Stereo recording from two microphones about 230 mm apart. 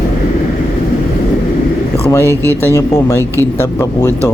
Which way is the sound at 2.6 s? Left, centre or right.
Centre.